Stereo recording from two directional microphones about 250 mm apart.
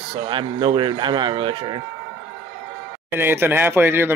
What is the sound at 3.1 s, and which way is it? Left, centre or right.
Speech, centre.